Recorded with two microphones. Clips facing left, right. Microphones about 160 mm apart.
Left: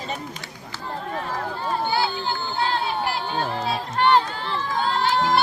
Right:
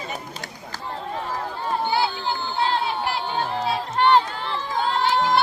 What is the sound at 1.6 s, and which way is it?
Run, 15° right (ahead or behind).